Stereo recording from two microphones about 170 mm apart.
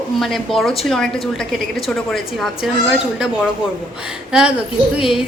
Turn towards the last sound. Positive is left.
turn(degrees=-5)  # may be behind; listen again after turning